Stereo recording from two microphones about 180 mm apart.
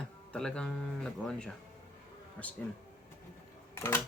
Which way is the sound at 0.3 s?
5° left (ahead or behind).